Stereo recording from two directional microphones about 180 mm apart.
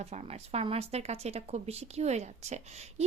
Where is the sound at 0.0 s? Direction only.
35° right (ahead or behind).